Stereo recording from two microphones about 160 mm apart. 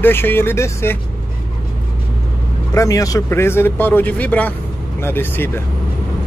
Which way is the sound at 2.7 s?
20° left (ahead or behind).